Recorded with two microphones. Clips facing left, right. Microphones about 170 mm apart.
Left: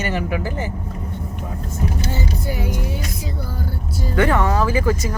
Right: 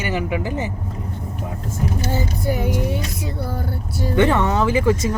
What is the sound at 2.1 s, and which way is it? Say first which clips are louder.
Vehicle: right 3 dB; 50° right (ahead or behind).